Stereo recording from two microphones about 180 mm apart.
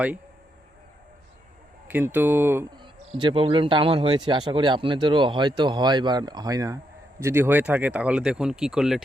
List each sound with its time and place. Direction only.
1.9 s speech: 10° right (ahead or behind)
2.7 s speech: 25° right (ahead or behind); by 9.0 s 5° right (ahead or behind)